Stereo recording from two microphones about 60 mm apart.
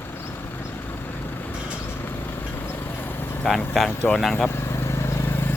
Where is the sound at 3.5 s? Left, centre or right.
Centre.